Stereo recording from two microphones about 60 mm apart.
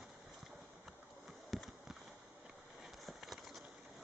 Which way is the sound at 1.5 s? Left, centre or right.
Centre.